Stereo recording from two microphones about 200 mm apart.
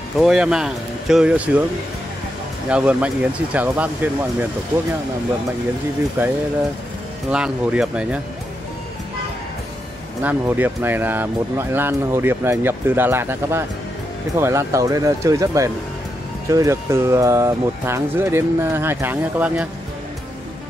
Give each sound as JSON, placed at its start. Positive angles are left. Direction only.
{"t": 0.2, "sound": "speech", "side_deg": -5}
{"t": 2.7, "sound": "speech", "side_deg": -5}
{"t": 6.2, "sound": "speech", "side_deg": -10}
{"t": 10.2, "sound": "speech", "side_deg": -10}